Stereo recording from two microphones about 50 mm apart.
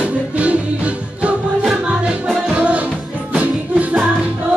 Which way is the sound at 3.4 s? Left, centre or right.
Right.